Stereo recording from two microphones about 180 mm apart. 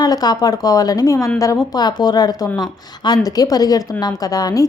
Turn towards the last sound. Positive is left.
turn(degrees=20)  # may be behind; listen again after turning